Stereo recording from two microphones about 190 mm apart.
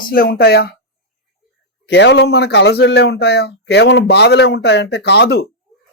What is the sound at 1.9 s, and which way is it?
Speech, 65° left (ahead or behind).